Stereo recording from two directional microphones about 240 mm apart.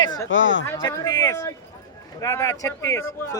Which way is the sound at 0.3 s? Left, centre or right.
Left.